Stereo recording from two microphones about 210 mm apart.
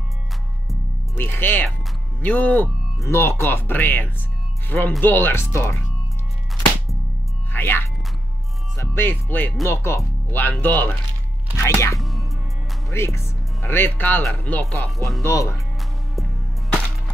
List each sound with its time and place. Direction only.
1.1 s music: 10° left (ahead or behind)
2.2 s speech: 5° left (ahead or behind)
7.5 s speech: 10° left (ahead or behind)
12.0 s music: centre (ahead or behind)
12.9 s speech: 15° left (ahead or behind)